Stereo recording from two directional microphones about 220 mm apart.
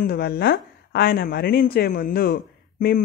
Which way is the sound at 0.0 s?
45° left (ahead or behind).